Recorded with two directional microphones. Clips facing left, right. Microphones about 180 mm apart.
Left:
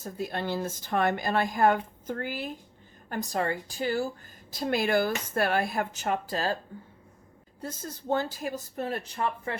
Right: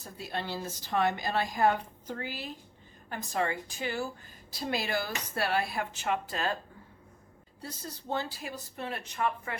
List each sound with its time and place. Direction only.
0.0 s a woman's voice: 50° left (ahead or behind)
4.5 s a woman's voice: 50° left (ahead or behind)
7.6 s a woman's voice: 50° left (ahead or behind); by 9.6 s 30° left (ahead or behind)